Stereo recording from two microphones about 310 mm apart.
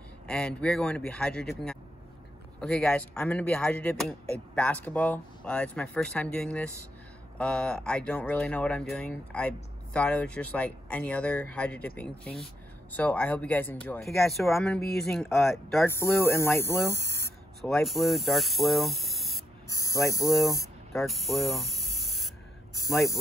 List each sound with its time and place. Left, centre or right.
0.3 s speech: centre
16.9 s speech: right
17.2 s speech: centre
19.7 s speech: centre
20.9 s spray: centre